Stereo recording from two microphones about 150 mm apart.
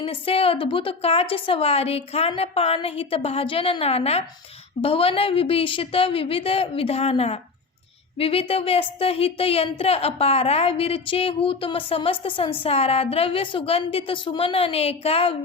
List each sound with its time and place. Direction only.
0.0 s a woman's voice: 40° left (ahead or behind)